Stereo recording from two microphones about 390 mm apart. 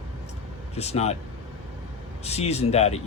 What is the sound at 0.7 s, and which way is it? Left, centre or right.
Speech, centre.